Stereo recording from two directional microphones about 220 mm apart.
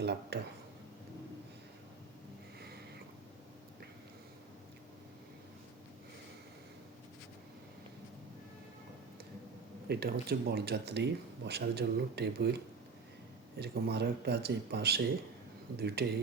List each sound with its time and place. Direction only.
0.0 s speech: 50° right (ahead or behind)
9.9 s speech: 45° right (ahead or behind)
13.6 s speech: 50° right (ahead or behind)